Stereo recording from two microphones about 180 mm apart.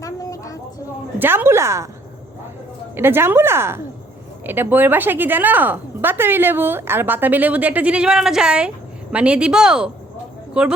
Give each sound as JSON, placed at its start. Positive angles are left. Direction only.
{"t": 0.0, "sound": "a sound", "side_deg": 20}
{"t": 1.2, "sound": "a woman's voice", "side_deg": -10}
{"t": 2.9, "sound": "a woman's voice", "side_deg": -10}